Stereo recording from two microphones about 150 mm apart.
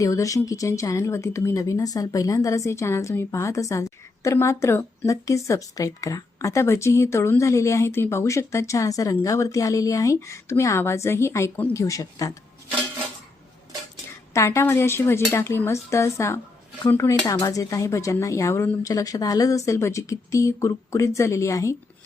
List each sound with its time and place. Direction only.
0.0 s speech: 20° left (ahead or behind)
14.3 s speech: 20° left (ahead or behind)